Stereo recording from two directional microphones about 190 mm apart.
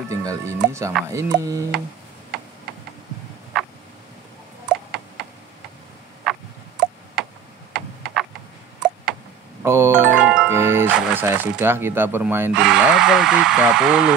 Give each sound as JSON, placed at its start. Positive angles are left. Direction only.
{"t": 0.1, "sound": "speech", "side_deg": -15}
{"t": 7.2, "sound": "tick-tock", "side_deg": -5}
{"t": 7.7, "sound": "a sound", "side_deg": 0}
{"t": 9.6, "sound": "music", "side_deg": -15}
{"t": 10.0, "sound": "speech", "side_deg": -5}